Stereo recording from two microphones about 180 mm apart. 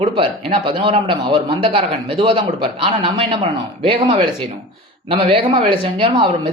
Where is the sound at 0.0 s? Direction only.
30° right (ahead or behind).